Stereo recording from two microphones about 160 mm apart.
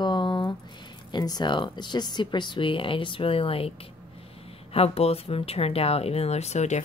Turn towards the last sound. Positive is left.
turn(degrees=45)  # may be behind; listen again after turning